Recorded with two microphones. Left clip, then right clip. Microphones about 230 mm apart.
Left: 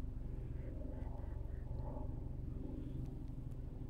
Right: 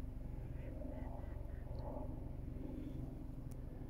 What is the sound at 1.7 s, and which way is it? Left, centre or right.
Vehicle, right.